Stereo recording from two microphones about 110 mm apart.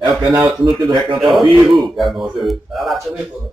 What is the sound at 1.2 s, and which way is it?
A man's voice, centre (ahead or behind).